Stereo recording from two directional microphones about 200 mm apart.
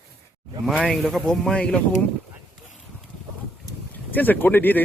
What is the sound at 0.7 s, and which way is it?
Speech, centre (ahead or behind).